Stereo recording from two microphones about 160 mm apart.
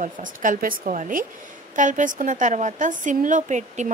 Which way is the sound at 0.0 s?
55° right (ahead or behind).